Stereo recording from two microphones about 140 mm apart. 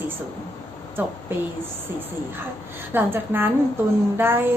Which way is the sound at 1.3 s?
15° right (ahead or behind).